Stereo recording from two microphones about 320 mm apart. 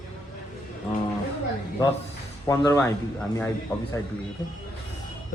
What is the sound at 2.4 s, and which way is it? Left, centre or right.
Speech, centre.